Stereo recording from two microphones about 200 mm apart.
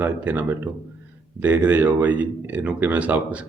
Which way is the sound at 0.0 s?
10° right (ahead or behind).